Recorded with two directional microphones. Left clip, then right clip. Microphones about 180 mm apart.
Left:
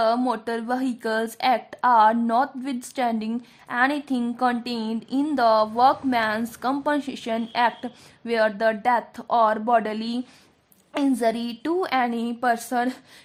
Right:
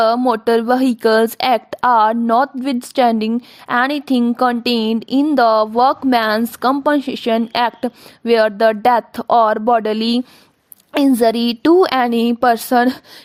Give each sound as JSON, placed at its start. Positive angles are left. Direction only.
{"t": 0.3, "sound": "speech", "side_deg": -45}